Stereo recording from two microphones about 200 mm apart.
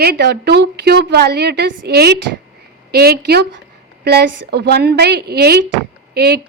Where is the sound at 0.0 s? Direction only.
55° right (ahead or behind).